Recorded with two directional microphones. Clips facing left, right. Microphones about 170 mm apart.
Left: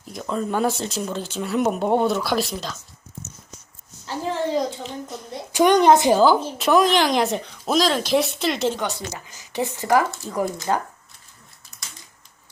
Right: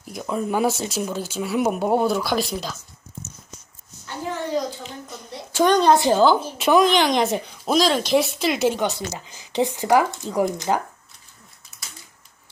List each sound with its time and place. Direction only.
0.1 s speech: 10° right (ahead or behind)
4.0 s a sound: 25° left (ahead or behind)
4.8 s a sound: centre (ahead or behind)
5.5 s a woman's voice: 15° left (ahead or behind)
6.1 s speech: 5° left (ahead or behind)
8.8 s speech: 20° right (ahead or behind)